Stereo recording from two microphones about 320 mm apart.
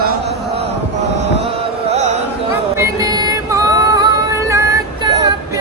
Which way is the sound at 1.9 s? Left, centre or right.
Right.